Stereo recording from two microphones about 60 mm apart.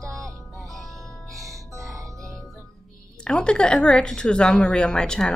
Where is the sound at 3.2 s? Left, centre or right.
Centre.